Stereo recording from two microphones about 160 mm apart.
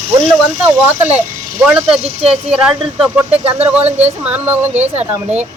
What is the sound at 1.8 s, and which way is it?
Speech, 35° right (ahead or behind).